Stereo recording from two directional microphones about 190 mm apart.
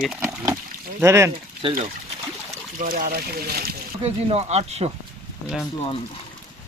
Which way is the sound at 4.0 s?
35° right (ahead or behind).